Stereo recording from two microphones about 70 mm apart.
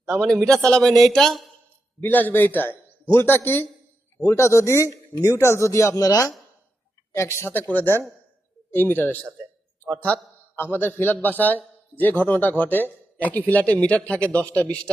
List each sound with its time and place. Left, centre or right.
0.4 s speech: centre
2.0 s a man's voice: left
7.1 s speech: left
7.7 s a man's voice: left
10.5 s a man's voice: left